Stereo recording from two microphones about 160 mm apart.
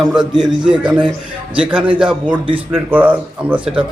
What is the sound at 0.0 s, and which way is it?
A man's voice, 5° right (ahead or behind).